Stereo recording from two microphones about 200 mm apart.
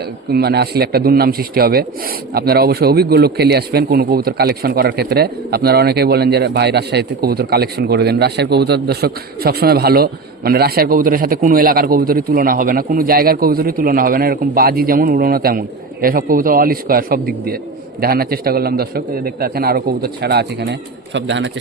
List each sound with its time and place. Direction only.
0.3 s speech: 55° right (ahead or behind)